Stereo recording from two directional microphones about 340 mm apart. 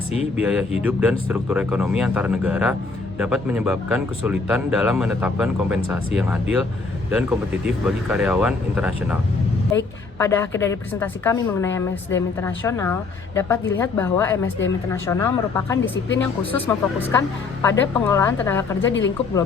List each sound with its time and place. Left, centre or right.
0.3 s speech: centre
9.7 s speech: centre
18.9 s speech: left